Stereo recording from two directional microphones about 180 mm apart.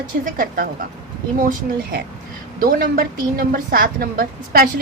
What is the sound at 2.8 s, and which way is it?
A woman's voice, 55° right (ahead or behind).